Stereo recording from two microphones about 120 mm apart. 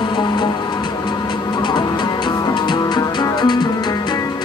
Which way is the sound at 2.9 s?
35° left (ahead or behind).